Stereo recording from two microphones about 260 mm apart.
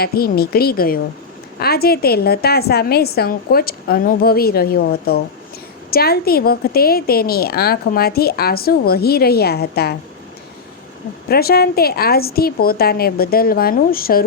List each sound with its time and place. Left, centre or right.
0.0 s a woman's voice: left
11.3 s a woman's voice: left